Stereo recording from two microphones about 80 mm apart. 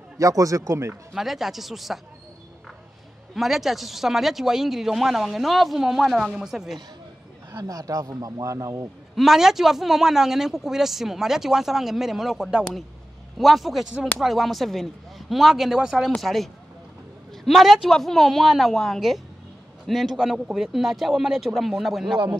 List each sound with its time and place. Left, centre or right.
0.2 s speech: right
1.1 s speech: centre
3.3 s speech: centre
7.5 s speech: right
9.1 s speech: centre
17.5 s speech: centre